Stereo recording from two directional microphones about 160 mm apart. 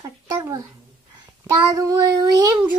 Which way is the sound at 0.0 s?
25° right (ahead or behind).